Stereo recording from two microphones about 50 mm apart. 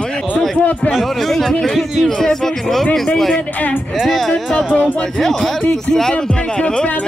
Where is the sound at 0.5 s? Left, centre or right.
Left.